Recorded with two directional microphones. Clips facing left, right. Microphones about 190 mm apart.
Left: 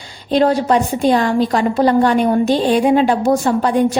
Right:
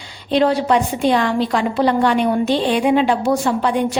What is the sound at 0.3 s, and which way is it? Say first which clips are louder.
A woman's voice: left 2 dB; 45° left (ahead or behind).